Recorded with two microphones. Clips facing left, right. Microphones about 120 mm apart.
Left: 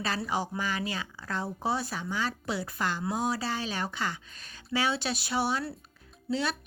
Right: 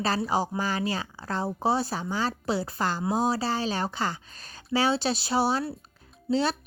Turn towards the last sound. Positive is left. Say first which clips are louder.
# right 5 dB
turn(degrees=-30)  # may be behind; listen again after turning